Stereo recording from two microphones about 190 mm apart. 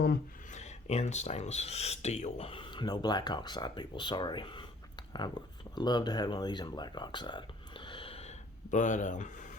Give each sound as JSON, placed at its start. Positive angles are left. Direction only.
{"t": 0.5, "sound": "speech", "side_deg": 35}